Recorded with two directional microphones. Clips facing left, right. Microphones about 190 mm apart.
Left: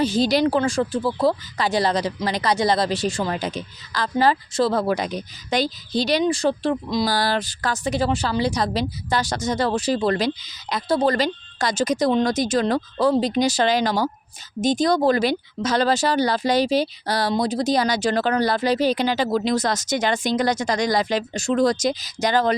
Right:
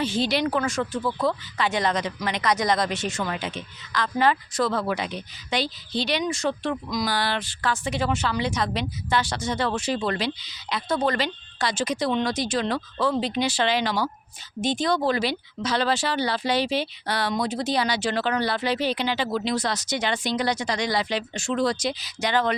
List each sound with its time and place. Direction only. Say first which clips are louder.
0.0 s speech: left 5 dB; 40° left (ahead or behind)